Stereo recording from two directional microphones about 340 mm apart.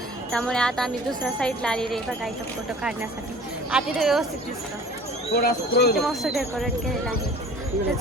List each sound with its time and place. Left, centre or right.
0.3 s speech: centre
3.7 s speech: centre
5.3 s speech: left
6.0 s speech: centre